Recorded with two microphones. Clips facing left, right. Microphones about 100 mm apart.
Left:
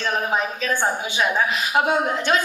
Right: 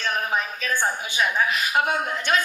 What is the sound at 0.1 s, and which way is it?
A woman's voice, 25° left (ahead or behind).